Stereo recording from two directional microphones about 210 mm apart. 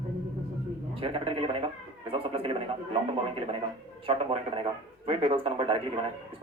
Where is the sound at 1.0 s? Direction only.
25° right (ahead or behind).